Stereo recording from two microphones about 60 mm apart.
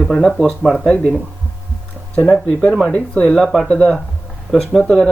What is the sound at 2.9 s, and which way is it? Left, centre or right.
Speech, centre.